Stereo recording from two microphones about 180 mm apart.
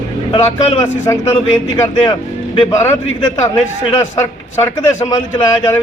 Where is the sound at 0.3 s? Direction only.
15° left (ahead or behind).